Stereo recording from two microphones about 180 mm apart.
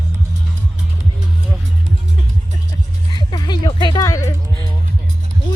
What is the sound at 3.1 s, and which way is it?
Music, 25° left (ahead or behind).